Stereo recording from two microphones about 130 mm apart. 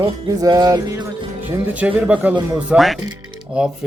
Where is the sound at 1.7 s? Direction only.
10° right (ahead or behind).